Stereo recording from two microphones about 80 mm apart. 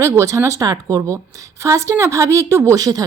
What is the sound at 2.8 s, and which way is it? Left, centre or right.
Speech, right.